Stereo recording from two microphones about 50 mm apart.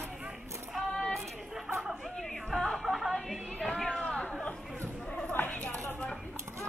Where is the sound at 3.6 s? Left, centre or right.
Centre.